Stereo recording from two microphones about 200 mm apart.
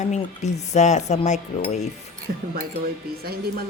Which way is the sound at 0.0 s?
35° left (ahead or behind).